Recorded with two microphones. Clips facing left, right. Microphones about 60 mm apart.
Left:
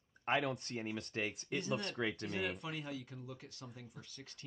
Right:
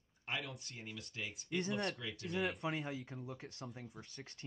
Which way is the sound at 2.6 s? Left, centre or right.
Right.